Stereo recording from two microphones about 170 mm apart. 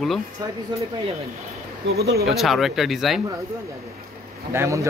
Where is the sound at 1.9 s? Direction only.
70° right (ahead or behind).